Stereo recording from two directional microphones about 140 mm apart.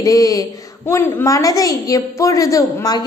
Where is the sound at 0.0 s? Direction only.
25° left (ahead or behind).